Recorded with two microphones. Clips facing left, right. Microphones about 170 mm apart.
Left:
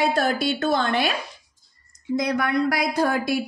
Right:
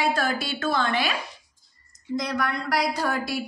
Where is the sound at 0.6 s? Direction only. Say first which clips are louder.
Left 3 dB; 45° left (ahead or behind).